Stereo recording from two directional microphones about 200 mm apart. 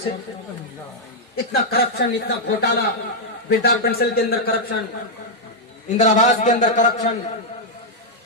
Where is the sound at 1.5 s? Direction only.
55° left (ahead or behind).